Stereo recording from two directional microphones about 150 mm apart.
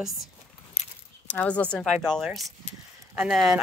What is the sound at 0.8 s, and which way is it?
Keys jangling, 45° left (ahead or behind).